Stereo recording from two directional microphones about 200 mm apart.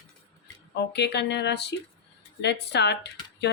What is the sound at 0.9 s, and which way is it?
A woman's voice, 55° left (ahead or behind).